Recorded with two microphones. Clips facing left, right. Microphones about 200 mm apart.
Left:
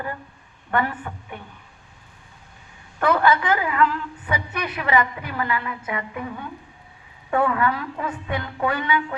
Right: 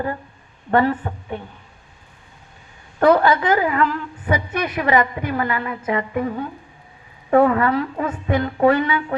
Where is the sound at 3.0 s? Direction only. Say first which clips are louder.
Right 5 dB; 35° right (ahead or behind).